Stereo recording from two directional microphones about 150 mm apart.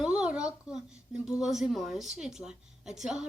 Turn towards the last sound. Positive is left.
turn(degrees=0)  # may be behind; listen again after turning